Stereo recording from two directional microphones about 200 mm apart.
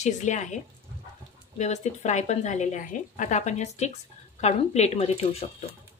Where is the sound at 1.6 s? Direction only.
35° left (ahead or behind).